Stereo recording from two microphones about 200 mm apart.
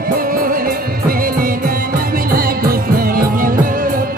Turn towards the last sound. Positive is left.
turn(degrees=-45)  # may be behind; listen again after turning